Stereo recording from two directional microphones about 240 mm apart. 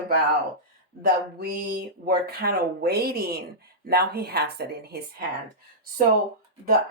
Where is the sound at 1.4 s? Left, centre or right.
Right.